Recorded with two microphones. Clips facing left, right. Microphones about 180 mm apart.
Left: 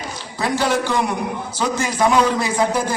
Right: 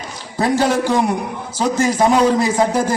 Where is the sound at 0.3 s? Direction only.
45° right (ahead or behind).